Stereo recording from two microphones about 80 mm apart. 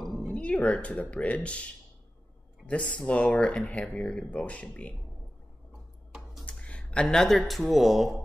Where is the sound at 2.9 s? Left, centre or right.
Centre.